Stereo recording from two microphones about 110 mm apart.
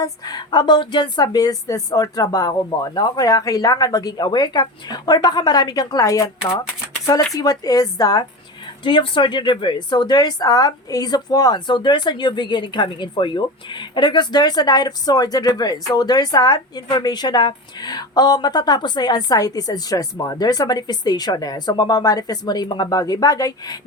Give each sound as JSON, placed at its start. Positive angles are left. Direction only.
{"t": 0.0, "sound": "a woman's voice", "side_deg": 40}
{"t": 8.8, "sound": "a woman's voice", "side_deg": 45}